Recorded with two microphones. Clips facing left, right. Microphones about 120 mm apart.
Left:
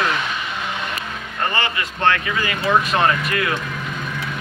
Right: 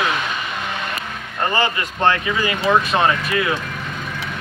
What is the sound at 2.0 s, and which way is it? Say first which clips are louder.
Speech: right 2 dB; 20° right (ahead or behind).